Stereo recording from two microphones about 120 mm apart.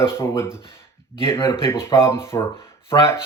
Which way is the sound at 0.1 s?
20° left (ahead or behind).